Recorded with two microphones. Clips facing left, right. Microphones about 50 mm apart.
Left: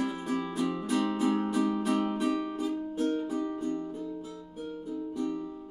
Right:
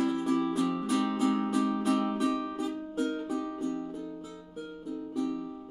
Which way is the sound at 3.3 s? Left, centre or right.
Centre.